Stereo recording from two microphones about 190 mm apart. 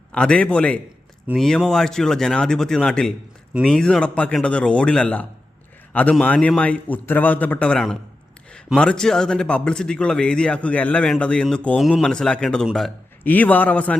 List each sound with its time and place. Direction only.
0.1 s a man's voice: 5° left (ahead or behind)